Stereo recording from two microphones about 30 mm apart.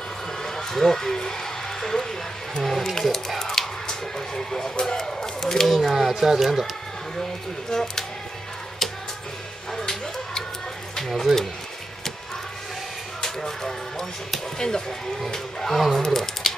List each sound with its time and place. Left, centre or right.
0.4 s a sound: centre
2.6 s speech: centre
3.3 s speech: centre
4.4 s speech: centre
5.7 s speech: centre
5.9 s speech: centre
7.7 s speech: centre
9.8 s a sound: centre
13.2 s a sound: centre
14.6 s speech: centre
15.7 s speech: centre
16.0 s speech: centre